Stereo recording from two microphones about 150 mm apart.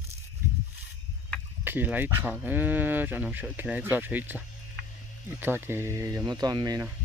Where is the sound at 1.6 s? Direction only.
10° right (ahead or behind).